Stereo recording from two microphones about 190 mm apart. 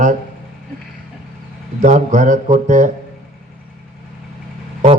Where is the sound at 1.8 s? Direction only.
40° right (ahead or behind).